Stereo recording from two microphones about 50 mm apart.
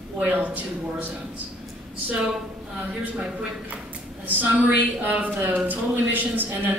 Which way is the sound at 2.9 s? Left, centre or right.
Right.